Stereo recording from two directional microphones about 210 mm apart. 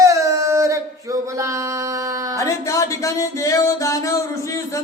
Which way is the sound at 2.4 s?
15° left (ahead or behind).